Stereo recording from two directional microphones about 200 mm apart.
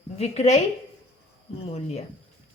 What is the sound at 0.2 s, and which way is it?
Speech, 35° left (ahead or behind).